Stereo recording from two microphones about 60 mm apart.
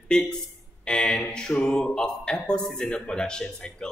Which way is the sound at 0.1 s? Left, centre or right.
Centre.